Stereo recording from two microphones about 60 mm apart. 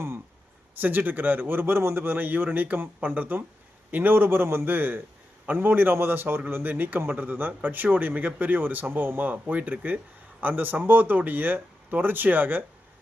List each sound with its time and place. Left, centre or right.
0.8 s speech: right